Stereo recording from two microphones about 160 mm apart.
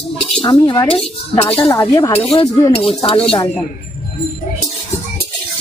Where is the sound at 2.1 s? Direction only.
35° left (ahead or behind).